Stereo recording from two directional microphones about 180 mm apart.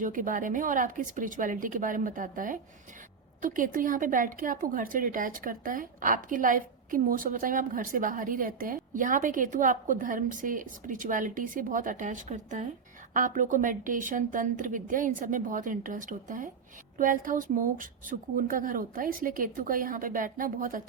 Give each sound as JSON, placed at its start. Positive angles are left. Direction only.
{"t": 0.0, "sound": "a woman's voice", "side_deg": -45}